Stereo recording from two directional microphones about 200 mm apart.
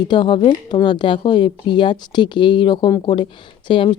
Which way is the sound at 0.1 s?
25° left (ahead or behind).